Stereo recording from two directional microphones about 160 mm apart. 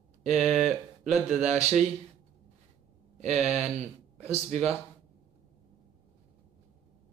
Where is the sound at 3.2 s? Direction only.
45° right (ahead or behind).